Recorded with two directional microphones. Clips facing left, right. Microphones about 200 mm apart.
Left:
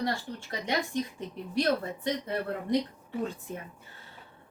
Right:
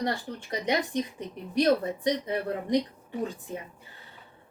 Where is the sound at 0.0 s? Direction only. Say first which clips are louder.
Right 1 dB; 20° right (ahead or behind).